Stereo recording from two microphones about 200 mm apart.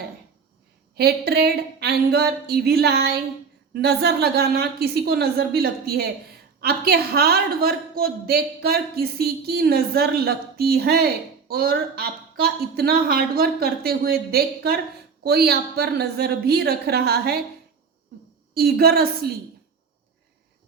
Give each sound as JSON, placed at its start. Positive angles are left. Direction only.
{"t": 0.9, "sound": "speech", "side_deg": -55}
{"t": 18.5, "sound": "speech", "side_deg": -50}